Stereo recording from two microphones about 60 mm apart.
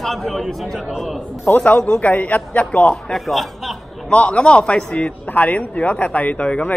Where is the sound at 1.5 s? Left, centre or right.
Left.